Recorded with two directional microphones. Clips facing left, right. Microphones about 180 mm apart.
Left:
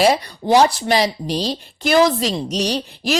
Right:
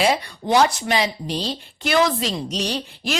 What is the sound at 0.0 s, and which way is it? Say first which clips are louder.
A woman's voice: left 4 dB; 40° left (ahead or behind).